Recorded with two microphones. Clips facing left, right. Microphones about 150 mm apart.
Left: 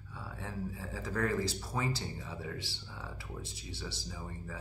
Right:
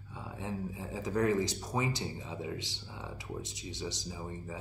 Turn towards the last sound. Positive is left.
turn(degrees=-20)  # may be behind; listen again after turning